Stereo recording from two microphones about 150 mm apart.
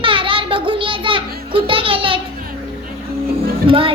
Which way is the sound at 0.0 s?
35° right (ahead or behind).